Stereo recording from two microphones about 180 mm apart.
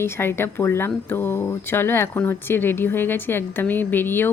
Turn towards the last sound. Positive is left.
turn(degrees=10)  # may be behind; listen again after turning